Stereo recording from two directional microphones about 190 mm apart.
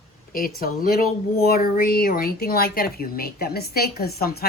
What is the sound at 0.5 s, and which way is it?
Speech, 50° left (ahead or behind).